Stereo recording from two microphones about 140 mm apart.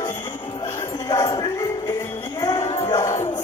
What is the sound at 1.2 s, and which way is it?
Music, 35° left (ahead or behind).